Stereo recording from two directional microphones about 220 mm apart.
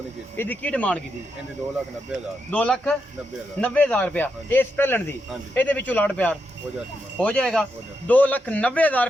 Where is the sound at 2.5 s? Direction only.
5° left (ahead or behind).